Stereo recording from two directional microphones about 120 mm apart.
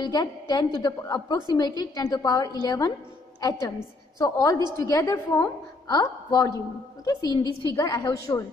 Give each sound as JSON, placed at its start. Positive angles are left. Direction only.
{"t": 0.0, "sound": "a woman's voice", "side_deg": 35}